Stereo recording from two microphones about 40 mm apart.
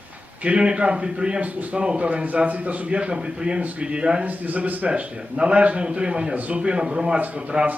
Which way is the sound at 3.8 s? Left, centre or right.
Right.